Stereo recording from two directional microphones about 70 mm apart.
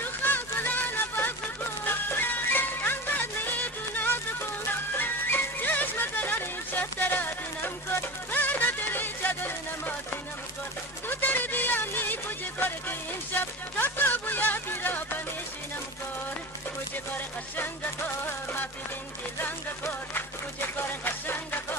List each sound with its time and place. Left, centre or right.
0.0 s music: left
8.0 s music: left
11.1 s music: left
13.7 s a sound: left
21.0 s music: left